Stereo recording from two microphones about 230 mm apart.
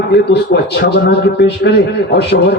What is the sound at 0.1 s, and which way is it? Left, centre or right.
A man's voice, left.